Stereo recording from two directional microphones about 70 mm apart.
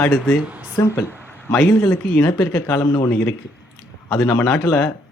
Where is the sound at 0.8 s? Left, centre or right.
Left.